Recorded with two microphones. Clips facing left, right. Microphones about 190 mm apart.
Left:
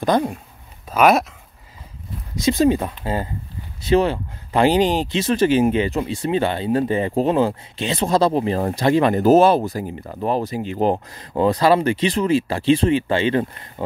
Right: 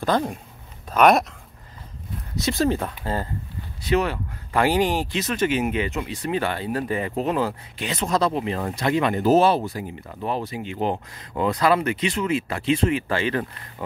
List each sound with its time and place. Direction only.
0.0 s speech: 15° left (ahead or behind)
0.8 s speech: 5° left (ahead or behind)
2.4 s speech: 15° left (ahead or behind)
3.8 s speech: 25° left (ahead or behind)